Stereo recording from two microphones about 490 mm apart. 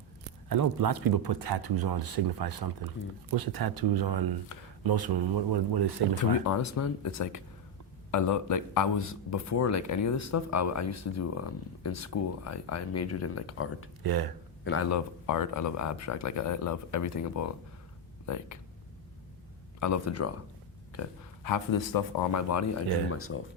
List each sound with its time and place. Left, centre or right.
0.4 s speech: right
6.4 s a man's voice: left
14.0 s speech: right
14.6 s a man's voice: left
19.8 s a man's voice: left
21.4 s a man's voice: left